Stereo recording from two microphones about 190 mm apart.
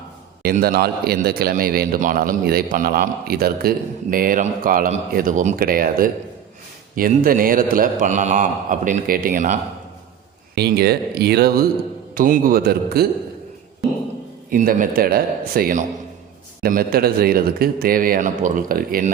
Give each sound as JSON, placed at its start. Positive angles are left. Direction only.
{"t": 0.4, "sound": "a man's voice", "side_deg": -55}
{"t": 10.5, "sound": "a man's voice", "side_deg": -55}
{"t": 14.5, "sound": "a man's voice", "side_deg": -45}